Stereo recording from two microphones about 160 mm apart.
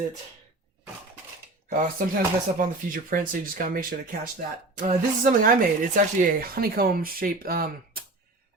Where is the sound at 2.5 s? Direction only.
55° right (ahead or behind).